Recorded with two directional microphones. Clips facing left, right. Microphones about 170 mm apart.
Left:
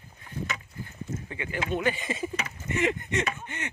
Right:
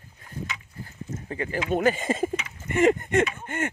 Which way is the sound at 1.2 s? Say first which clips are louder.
Right 6 dB; 40° right (ahead or behind).